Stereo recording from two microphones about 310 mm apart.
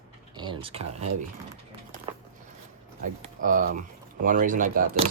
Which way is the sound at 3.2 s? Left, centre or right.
Right.